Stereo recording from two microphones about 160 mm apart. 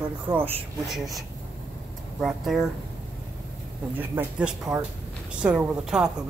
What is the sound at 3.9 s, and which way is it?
A woman's voice, 10° right (ahead or behind).